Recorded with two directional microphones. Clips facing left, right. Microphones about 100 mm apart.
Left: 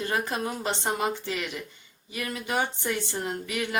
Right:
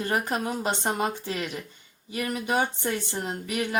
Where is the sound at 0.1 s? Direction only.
20° right (ahead or behind).